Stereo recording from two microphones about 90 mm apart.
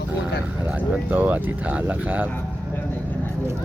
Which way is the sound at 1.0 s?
15° right (ahead or behind).